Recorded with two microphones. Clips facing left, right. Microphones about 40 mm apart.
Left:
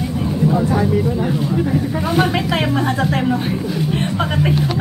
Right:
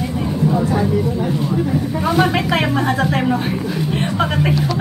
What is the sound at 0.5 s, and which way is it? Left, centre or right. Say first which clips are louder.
Speech: left 1 dB; centre.